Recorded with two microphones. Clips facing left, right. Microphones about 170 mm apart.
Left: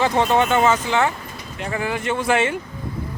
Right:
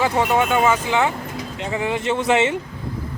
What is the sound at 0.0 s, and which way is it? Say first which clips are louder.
Speech: left 1 dB; 10° right (ahead or behind).